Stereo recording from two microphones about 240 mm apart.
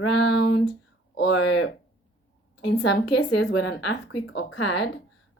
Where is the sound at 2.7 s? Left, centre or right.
Left.